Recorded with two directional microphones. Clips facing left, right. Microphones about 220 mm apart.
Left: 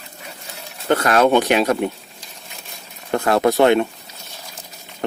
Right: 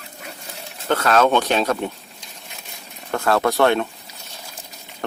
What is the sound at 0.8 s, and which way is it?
Speech, 15° left (ahead or behind).